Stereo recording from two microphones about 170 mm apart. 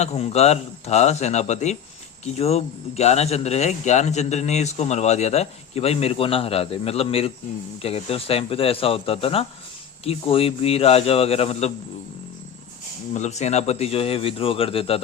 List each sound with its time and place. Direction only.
0.0 s speech: 35° left (ahead or behind)
13.1 s speech: 40° left (ahead or behind)